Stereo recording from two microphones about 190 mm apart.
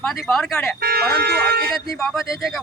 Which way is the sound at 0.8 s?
55° right (ahead or behind).